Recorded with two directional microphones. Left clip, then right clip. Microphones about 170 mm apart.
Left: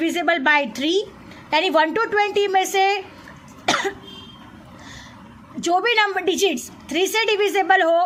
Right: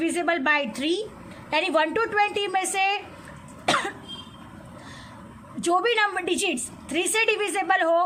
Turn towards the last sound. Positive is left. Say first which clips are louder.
# left 5 dB
turn(degrees=20)  # may be behind; listen again after turning